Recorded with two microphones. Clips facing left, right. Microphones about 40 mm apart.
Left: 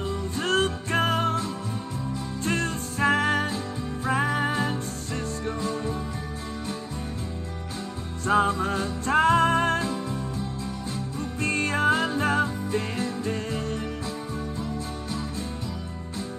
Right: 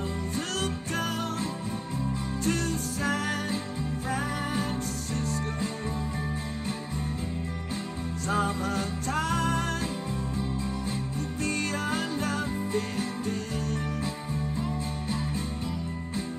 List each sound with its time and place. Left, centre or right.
0.4 s music: left
2.4 s music: left
8.3 s music: left
11.4 s music: left
14.6 s music: right